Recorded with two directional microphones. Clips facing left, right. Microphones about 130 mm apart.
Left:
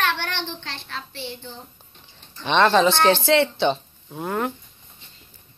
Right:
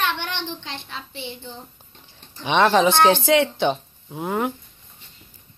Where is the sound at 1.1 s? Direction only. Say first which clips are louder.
Even; 15° right (ahead or behind).